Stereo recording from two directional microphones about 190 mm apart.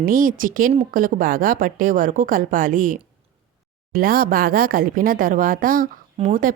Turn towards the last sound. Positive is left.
turn(degrees=-40)  # may be behind; listen again after turning